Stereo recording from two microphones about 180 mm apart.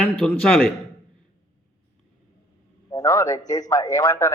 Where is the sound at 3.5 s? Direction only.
20° left (ahead or behind).